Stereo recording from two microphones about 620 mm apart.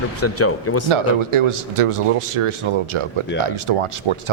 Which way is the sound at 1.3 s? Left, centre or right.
Right.